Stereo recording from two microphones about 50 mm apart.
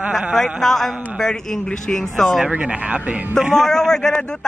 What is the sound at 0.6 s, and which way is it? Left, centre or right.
A man's voice, centre.